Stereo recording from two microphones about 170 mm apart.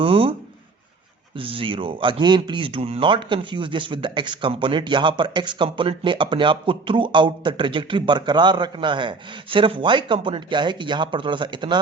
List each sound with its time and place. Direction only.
0.0 s speech: 30° right (ahead or behind)
1.4 s speech: 30° right (ahead or behind)